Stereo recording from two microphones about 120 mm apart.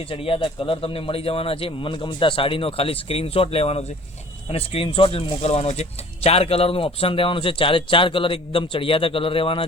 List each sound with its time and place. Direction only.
0.1 s speech: 50° left (ahead or behind)